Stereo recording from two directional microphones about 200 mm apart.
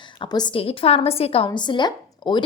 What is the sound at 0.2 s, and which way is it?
A woman's voice, 20° left (ahead or behind).